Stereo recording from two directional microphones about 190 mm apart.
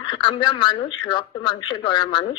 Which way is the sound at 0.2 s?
25° left (ahead or behind).